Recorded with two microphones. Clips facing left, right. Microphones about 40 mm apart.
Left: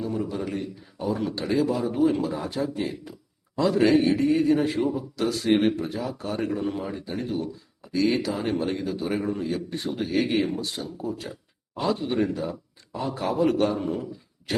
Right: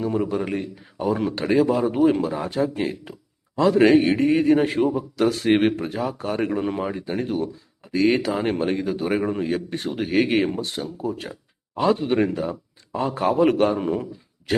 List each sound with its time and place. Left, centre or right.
0.0 s a man's voice: right